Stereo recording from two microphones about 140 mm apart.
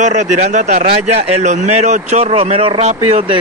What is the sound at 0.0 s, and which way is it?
Speech, 60° right (ahead or behind).